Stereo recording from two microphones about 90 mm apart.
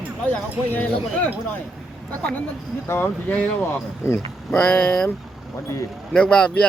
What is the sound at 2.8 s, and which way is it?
Speech, 25° left (ahead or behind).